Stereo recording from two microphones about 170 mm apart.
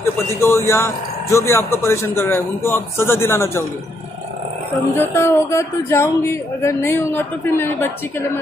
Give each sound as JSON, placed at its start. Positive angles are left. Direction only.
{"t": 0.4, "sound": "a man's voice", "side_deg": 15}
{"t": 4.9, "sound": "a man's voice", "side_deg": 15}